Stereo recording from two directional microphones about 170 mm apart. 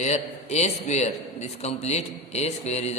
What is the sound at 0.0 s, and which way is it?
A man's voice, 40° left (ahead or behind).